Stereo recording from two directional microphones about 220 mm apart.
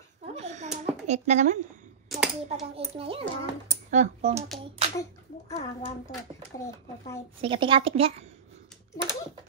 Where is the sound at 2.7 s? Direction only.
25° right (ahead or behind).